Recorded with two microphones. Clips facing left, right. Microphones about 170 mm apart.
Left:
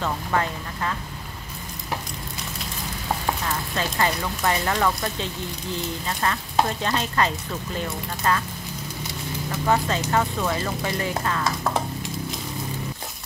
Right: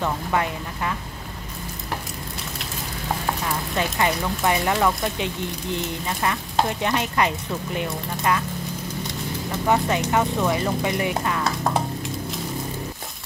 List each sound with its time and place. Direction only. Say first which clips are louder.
0.0 s speech: right 1 dB; 10° right (ahead or behind)
3.4 s speech: right 2 dB; 15° right (ahead or behind)
6.8 s speech: right 1 dB; 15° right (ahead or behind)
9.7 s speech: right 2 dB; 15° right (ahead or behind)